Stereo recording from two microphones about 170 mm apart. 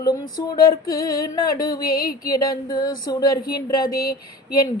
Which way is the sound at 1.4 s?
20° left (ahead or behind).